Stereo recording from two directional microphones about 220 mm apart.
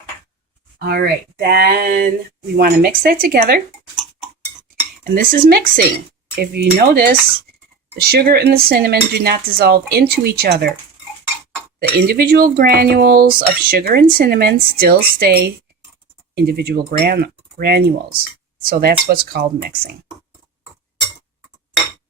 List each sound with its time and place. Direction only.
0.9 s speech: 45° right (ahead or behind)
5.1 s speech: 45° right (ahead or behind)
11.8 s speech: 45° right (ahead or behind)